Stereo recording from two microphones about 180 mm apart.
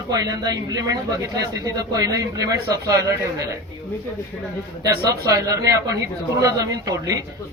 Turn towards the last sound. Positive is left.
turn(degrees=-20)  # may be behind; listen again after turning